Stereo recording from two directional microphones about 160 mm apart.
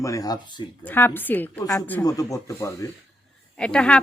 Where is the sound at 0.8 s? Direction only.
10° left (ahead or behind).